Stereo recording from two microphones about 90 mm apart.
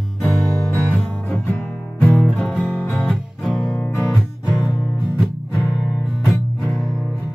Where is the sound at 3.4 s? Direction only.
Centre (ahead or behind).